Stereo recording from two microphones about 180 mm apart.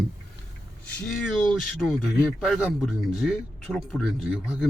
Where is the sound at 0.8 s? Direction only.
Centre (ahead or behind).